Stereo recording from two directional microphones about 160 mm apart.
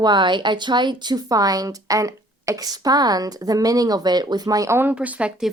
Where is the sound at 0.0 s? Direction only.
30° right (ahead or behind).